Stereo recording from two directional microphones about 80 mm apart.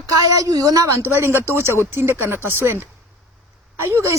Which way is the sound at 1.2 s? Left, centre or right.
Right.